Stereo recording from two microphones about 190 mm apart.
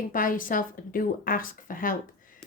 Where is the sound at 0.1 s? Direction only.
45° left (ahead or behind).